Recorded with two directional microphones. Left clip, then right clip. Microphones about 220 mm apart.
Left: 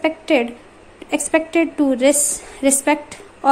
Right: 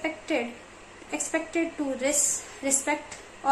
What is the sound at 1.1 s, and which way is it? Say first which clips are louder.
Speech: left 11 dB; 40° left (ahead or behind).